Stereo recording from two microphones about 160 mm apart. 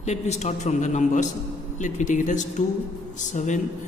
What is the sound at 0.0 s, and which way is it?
A woman's voice, 45° left (ahead or behind).